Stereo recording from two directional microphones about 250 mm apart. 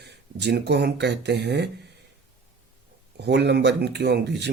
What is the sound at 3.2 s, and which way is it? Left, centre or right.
Speech, right.